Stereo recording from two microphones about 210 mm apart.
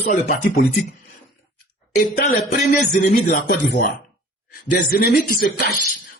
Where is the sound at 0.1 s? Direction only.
40° left (ahead or behind).